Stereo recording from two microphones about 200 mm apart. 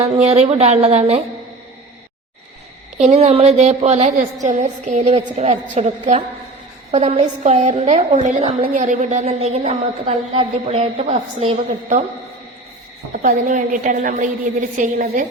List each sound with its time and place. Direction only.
0.0 s a woman's voice: 30° right (ahead or behind)
3.0 s a woman's voice: 35° right (ahead or behind)
13.1 s a woman's voice: 40° right (ahead or behind)